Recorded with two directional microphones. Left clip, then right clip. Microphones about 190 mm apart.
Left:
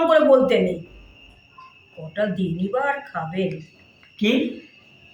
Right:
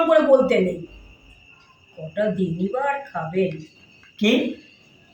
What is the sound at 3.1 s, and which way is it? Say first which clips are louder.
Speech: even; 25° left (ahead or behind).